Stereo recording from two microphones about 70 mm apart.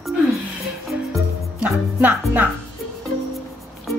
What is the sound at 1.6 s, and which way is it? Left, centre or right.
Speech, right.